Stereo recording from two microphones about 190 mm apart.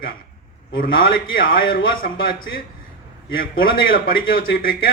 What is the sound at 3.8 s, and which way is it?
Speech, 50° left (ahead or behind).